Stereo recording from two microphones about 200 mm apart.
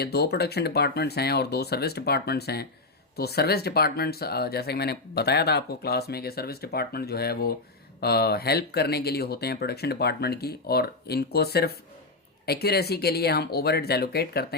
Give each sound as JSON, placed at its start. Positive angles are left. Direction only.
{"t": 0.0, "sound": "speech", "side_deg": 55}